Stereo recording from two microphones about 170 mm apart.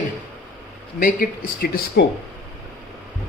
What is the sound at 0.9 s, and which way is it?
Speech, 55° left (ahead or behind).